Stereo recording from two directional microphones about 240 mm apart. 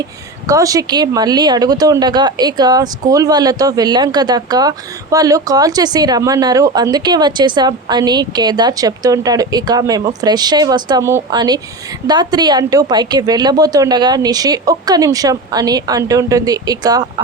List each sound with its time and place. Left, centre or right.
0.4 s speech: centre